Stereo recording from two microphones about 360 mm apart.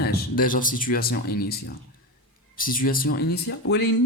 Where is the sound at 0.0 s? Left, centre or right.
Left.